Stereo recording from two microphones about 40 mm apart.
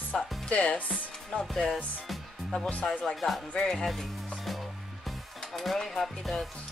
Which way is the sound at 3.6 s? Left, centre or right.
Centre.